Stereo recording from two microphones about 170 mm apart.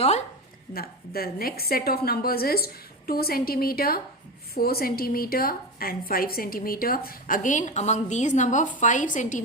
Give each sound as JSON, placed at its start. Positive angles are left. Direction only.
{"t": 0.7, "sound": "a woman's voice", "side_deg": 60}